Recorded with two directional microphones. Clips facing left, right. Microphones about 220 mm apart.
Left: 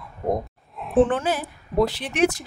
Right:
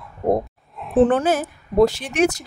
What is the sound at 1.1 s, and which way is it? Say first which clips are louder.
A woman's voice: right 5 dB; 45° right (ahead or behind).